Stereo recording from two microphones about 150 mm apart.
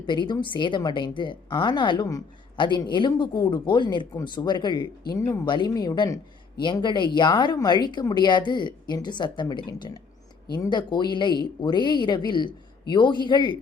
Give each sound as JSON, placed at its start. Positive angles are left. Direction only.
{"t": 0.0, "sound": "a woman's voice", "side_deg": 30}